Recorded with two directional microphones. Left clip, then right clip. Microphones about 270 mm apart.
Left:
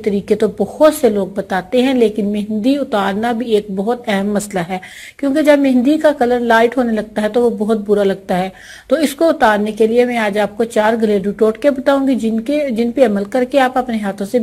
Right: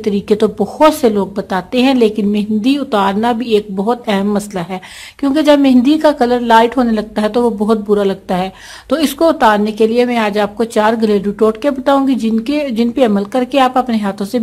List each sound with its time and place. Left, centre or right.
0.0 s speech: centre